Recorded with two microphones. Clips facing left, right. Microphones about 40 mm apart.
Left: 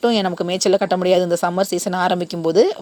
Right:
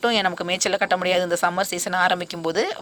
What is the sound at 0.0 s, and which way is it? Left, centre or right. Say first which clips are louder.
Speech: left 3 dB; right.